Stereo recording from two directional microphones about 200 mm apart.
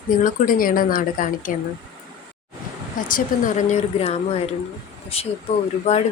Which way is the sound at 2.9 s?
40° left (ahead or behind).